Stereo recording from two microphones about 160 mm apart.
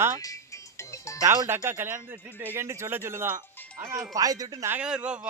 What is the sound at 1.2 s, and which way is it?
Speech, 20° right (ahead or behind).